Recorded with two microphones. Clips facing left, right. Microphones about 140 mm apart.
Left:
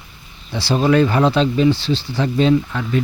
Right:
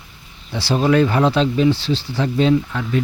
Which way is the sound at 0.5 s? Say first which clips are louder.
Left 1 dB; 5° right (ahead or behind).